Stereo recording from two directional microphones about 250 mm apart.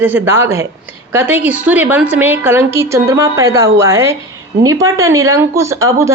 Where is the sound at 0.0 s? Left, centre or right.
Centre.